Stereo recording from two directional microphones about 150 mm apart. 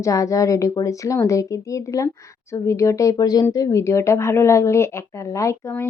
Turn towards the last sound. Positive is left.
turn(degrees=20)  # may be behind; listen again after turning